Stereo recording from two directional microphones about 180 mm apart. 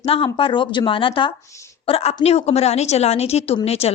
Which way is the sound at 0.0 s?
30° left (ahead or behind).